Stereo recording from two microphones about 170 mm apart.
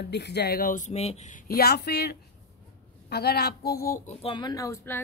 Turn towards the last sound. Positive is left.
turn(degrees=20)  # may be behind; listen again after turning